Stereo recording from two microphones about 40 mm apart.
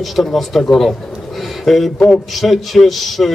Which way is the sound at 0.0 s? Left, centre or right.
Centre.